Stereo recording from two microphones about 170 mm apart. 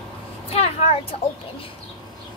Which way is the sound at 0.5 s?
35° left (ahead or behind).